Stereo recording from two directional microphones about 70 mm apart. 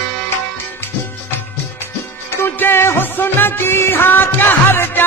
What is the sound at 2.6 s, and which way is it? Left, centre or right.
Music, left.